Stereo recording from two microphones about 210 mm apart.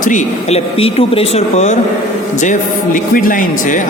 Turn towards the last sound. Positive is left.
turn(degrees=40)  # may be behind; listen again after turning